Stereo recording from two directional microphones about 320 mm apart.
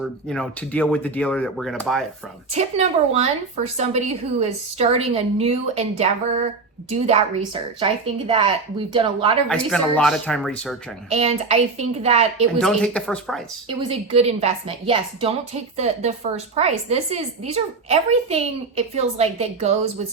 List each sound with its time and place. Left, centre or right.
0.0 s speech: centre
2.5 s a woman's voice: centre
9.5 s speech: centre
11.1 s a woman's voice: centre
12.5 s speech: centre
13.7 s a woman's voice: centre